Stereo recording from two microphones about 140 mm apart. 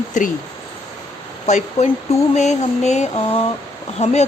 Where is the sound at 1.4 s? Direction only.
55° left (ahead or behind).